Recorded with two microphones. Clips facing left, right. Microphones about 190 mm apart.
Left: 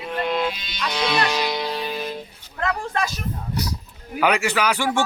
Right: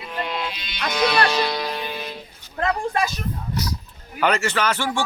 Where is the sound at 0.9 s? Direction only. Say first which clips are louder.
Right 3 dB; 25° left (ahead or behind).